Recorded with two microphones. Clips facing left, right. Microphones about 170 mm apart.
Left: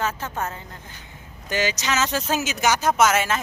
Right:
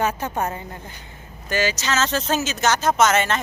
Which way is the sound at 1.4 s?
15° left (ahead or behind).